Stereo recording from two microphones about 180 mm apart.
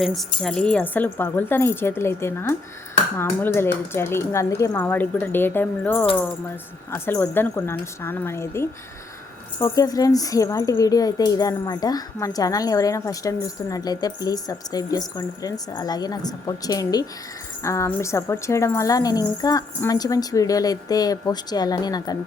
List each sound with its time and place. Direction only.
0.0 s a woman's voice: centre (ahead or behind); by 22.2 s 20° left (ahead or behind)